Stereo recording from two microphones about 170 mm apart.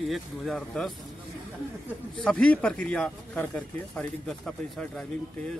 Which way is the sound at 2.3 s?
5° left (ahead or behind).